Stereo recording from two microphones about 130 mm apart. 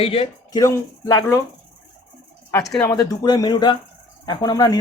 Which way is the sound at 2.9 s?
30° left (ahead or behind).